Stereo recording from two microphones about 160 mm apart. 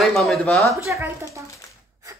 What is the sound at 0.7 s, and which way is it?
Speech, 20° right (ahead or behind).